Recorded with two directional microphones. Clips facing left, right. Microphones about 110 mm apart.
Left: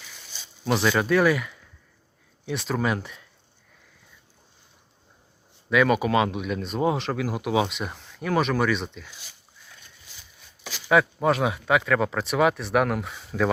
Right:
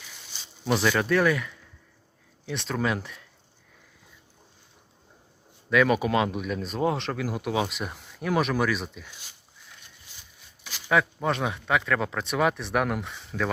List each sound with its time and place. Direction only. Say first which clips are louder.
0.7 s speech: left 2 dB; 5° left (ahead or behind)
5.7 s speech: left 1 dB; centre (ahead or behind)
10.6 s a sound: left 4 dB; 90° left
10.8 s speech: left 4 dB; 5° left (ahead or behind)